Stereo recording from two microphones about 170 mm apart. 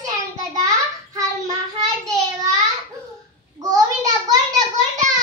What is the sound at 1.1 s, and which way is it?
Child singing, 20° right (ahead or behind).